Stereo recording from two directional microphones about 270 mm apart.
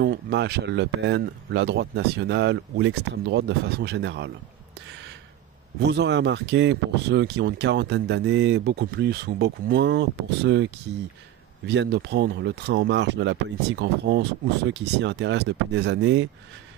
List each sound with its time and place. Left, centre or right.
0.0 s speech: right
5.8 s speech: right